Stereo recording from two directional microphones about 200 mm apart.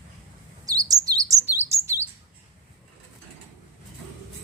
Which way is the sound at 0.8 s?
15° right (ahead or behind).